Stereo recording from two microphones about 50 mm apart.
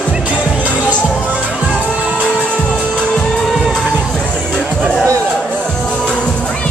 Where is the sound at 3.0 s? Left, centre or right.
Centre.